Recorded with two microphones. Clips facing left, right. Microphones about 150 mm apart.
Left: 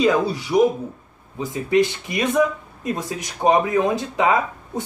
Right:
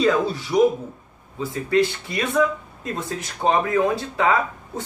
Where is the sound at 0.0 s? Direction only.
15° left (ahead or behind).